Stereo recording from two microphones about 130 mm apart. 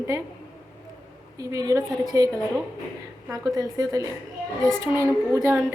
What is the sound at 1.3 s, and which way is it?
Speech, 25° right (ahead or behind).